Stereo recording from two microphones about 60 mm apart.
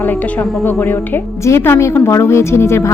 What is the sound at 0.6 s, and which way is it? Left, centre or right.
A woman's voice, left.